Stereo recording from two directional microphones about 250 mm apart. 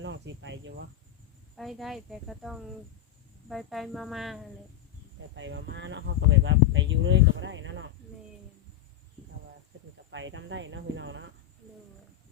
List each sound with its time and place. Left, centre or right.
0.0 s cricket: right
1.5 s speech: centre
5.3 s speech: right
10.1 s speech: right